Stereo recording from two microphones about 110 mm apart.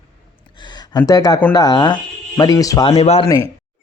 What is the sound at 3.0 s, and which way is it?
Speech, 70° left (ahead or behind).